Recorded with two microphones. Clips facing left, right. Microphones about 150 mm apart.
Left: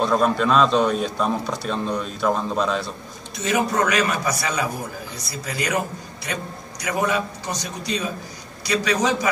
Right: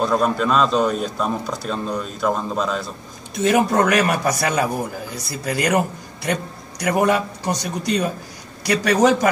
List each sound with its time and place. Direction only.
0.0 s a man's voice: 5° right (ahead or behind)
3.4 s a man's voice: 55° right (ahead or behind)